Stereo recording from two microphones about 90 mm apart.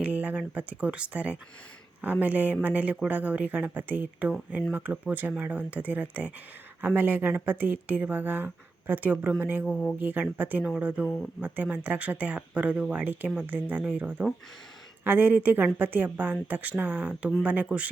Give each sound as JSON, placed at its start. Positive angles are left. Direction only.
{"t": 0.0, "sound": "speech", "side_deg": -15}